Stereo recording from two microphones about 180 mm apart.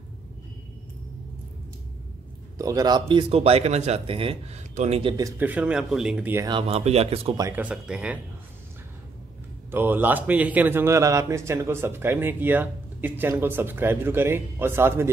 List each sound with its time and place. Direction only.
2.5 s speech: 20° right (ahead or behind); by 5.1 s 35° right (ahead or behind)
5.1 s a man's voice: 15° right (ahead or behind)
6.4 s speech: 30° right (ahead or behind)
7.3 s a man's voice: 15° right (ahead or behind)
9.7 s a man's voice: 10° right (ahead or behind)